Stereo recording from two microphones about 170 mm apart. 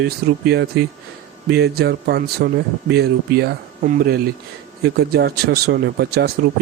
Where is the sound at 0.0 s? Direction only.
85° right.